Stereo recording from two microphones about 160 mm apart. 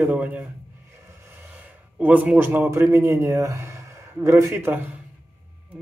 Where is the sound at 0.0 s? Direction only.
10° right (ahead or behind).